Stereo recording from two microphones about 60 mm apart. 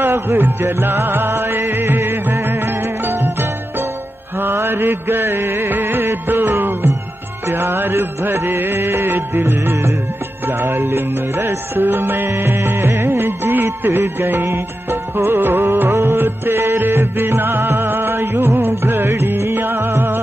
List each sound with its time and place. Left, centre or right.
0.4 s music: right
4.4 s music: right
7.5 s music: right
9.4 s music: right
15.9 s music: right